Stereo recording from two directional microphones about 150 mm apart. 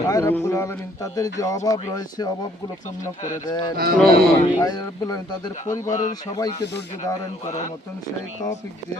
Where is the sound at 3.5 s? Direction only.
30° left (ahead or behind).